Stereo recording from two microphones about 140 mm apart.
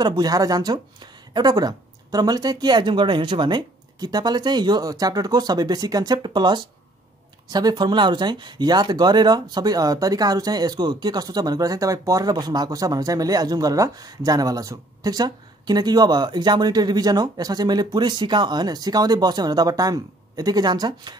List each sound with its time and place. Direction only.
0.0 s speech: 30° right (ahead or behind)